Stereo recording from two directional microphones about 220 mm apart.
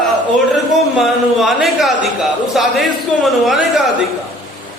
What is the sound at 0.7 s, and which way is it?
A man's voice, centre (ahead or behind).